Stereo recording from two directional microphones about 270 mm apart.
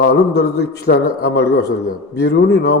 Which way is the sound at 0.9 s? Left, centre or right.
Left.